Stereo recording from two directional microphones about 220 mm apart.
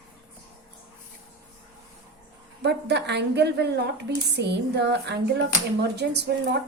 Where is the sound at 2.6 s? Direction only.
50° right (ahead or behind).